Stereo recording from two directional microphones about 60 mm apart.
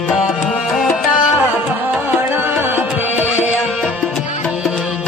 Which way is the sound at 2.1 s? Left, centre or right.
Right.